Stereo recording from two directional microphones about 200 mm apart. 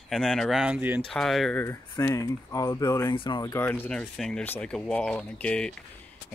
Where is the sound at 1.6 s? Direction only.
15° left (ahead or behind).